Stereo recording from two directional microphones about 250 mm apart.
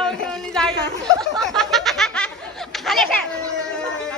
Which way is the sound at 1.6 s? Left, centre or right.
Centre.